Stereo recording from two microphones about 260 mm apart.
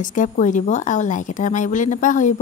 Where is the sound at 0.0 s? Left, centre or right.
Left.